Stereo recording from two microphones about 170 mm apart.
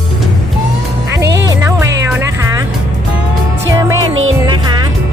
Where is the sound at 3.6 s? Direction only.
20° right (ahead or behind).